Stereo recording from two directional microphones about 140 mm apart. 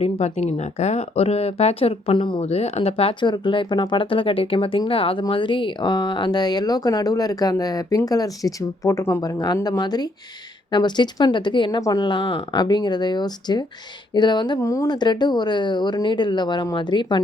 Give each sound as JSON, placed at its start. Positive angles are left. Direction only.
{"t": 0.0, "sound": "speech", "side_deg": 50}
{"t": 2.5, "sound": "speech", "side_deg": 50}